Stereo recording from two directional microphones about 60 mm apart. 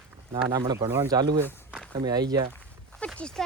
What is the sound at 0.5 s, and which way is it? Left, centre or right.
Speech, right.